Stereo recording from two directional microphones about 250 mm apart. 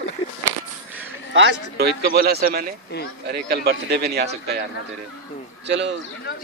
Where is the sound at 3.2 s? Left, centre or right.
Right.